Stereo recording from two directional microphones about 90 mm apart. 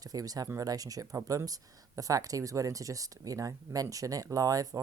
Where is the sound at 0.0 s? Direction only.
45° right (ahead or behind).